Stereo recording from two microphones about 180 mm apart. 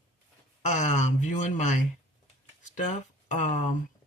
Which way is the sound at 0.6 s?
40° left (ahead or behind).